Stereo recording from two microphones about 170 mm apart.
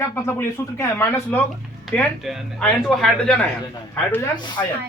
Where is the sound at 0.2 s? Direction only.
15° left (ahead or behind).